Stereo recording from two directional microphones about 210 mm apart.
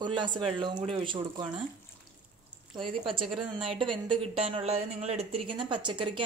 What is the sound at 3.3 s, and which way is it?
A man's voice, 25° right (ahead or behind).